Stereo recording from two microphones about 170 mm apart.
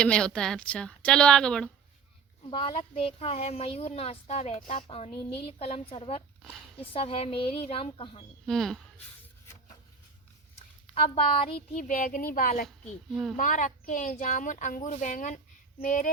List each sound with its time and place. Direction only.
0.0 s a woman's voice: 5° left (ahead or behind)
2.5 s speech: 30° left (ahead or behind)
8.4 s a woman's voice: 5° left (ahead or behind)
10.9 s speech: 35° left (ahead or behind)
11.8 s speech: 55° left (ahead or behind)